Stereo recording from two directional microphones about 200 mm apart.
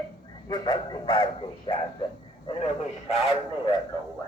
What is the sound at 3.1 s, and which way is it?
Speech, 30° left (ahead or behind).